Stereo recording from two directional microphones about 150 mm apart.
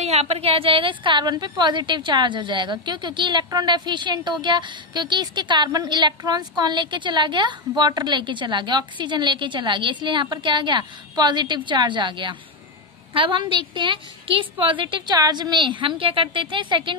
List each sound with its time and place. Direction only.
0.0 s a woman's voice: 45° right (ahead or behind)